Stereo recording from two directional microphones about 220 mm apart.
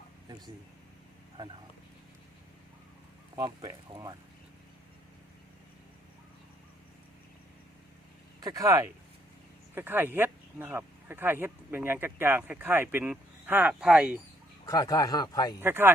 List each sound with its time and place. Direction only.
3.3 s speech: 15° right (ahead or behind)
8.4 s speech: 15° right (ahead or behind)
14.7 s speech: 15° left (ahead or behind)
15.6 s speech: 10° right (ahead or behind)